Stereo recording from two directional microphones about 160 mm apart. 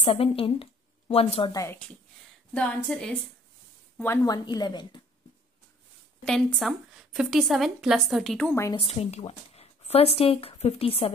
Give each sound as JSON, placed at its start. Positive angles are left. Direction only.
{"t": 0.0, "sound": "a woman's voice", "side_deg": 35}
{"t": 1.5, "sound": "speech", "side_deg": 20}
{"t": 2.5, "sound": "a woman's voice", "side_deg": 5}
{"t": 4.0, "sound": "speech", "side_deg": 20}
{"t": 6.2, "sound": "a woman's voice", "side_deg": 5}
{"t": 8.7, "sound": "speech", "side_deg": 40}